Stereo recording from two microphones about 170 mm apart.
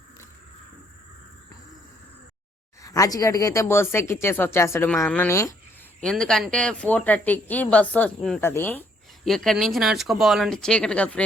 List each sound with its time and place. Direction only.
2.8 s speech: 20° left (ahead or behind)
6.0 s speech: 5° left (ahead or behind)